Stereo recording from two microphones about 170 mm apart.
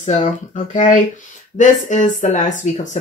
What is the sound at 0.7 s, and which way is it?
Speech, 45° left (ahead or behind).